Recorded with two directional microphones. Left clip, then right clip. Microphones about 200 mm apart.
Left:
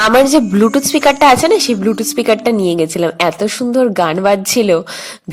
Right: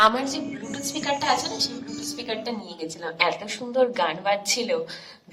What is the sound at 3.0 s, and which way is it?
A woman's voice, 35° left (ahead or behind).